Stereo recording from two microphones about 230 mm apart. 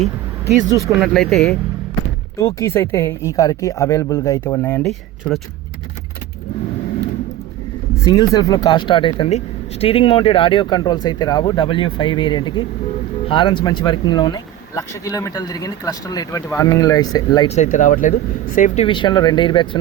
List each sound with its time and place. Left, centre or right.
0.6 s speech: centre
1.0 s speech: centre
2.4 s speech: centre
8.0 s speech: centre
17.6 s speech: left